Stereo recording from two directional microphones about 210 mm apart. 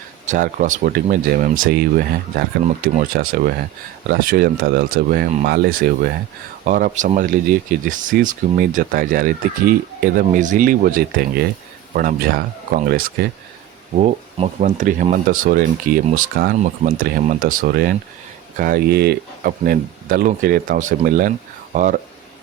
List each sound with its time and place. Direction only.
0.3 s speech: 35° right (ahead or behind)
13.9 s speech: 30° right (ahead or behind)